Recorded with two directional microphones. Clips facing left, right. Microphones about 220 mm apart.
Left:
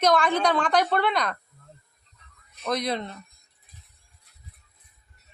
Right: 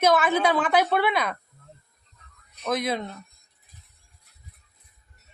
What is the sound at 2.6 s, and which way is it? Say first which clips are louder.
Speech: right 1 dB; 5° right (ahead or behind).